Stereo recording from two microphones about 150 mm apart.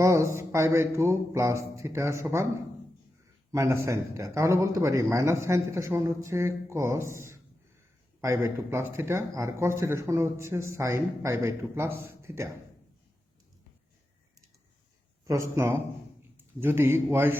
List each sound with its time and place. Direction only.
0.0 s speech: 20° right (ahead or behind)
3.5 s speech: 20° right (ahead or behind)
15.3 s speech: 20° right (ahead or behind)